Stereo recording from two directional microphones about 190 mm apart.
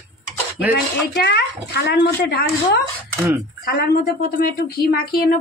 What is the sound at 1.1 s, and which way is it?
A woman's voice, 60° left (ahead or behind).